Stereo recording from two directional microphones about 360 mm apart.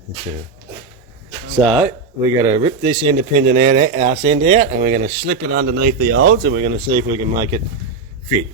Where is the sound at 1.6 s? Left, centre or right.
Centre; by 6.3 s right.